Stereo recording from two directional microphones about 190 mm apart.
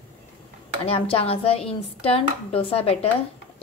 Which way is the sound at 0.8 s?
30° left (ahead or behind).